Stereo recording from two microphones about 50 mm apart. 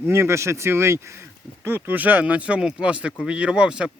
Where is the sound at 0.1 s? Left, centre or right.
Right.